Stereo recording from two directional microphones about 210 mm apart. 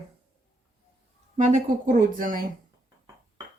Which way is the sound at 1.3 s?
35° right (ahead or behind).